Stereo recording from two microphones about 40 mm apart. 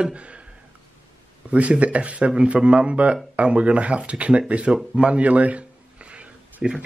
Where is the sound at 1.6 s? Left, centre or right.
Right.